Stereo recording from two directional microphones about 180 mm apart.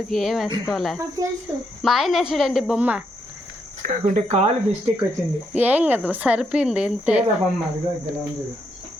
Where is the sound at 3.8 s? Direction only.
50° right (ahead or behind).